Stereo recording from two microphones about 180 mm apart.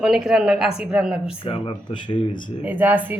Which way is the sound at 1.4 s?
30° left (ahead or behind).